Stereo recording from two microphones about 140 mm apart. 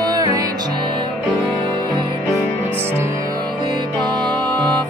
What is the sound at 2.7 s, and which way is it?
Music, 15° right (ahead or behind).